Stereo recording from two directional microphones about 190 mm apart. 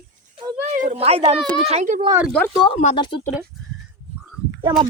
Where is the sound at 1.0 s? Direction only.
30° right (ahead or behind).